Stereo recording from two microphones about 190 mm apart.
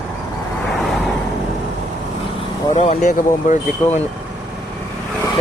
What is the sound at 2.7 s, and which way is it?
Speech, 35° left (ahead or behind).